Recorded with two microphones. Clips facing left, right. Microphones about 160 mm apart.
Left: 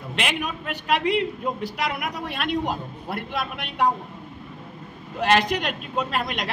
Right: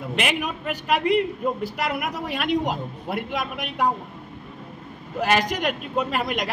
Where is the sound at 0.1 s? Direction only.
5° right (ahead or behind).